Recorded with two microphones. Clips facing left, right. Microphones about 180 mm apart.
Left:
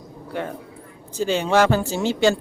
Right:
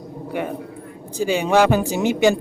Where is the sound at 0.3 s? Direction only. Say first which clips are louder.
Right 3 dB; 15° right (ahead or behind).